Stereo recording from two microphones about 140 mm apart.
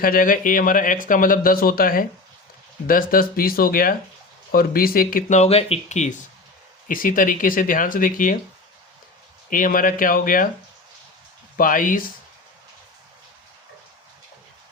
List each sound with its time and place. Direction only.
0.0 s speech: 85° left
5.4 s speech: 45° left (ahead or behind)
6.8 s speech: 75° left (ahead or behind)
9.5 s speech: 80° left
11.5 s speech: 80° left